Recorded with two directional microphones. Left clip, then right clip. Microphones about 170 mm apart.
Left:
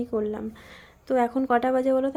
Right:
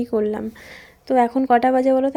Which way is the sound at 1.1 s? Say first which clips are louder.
Right 6 dB; 20° right (ahead or behind).